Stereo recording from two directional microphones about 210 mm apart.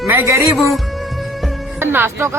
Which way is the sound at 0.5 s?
Centre (ahead or behind).